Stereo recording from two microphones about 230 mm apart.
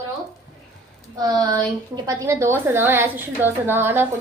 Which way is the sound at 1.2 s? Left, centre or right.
Centre.